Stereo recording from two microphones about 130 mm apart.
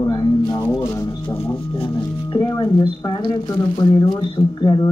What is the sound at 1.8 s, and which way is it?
Speech, 35° left (ahead or behind).